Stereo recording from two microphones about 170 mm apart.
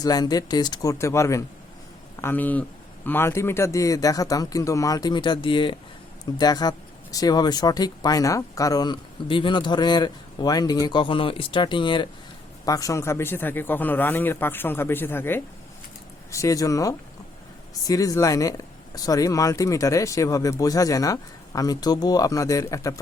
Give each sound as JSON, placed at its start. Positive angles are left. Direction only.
{"t": 0.0, "sound": "a man's voice", "side_deg": 20}